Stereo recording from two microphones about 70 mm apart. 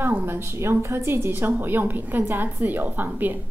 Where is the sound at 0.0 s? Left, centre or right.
Right.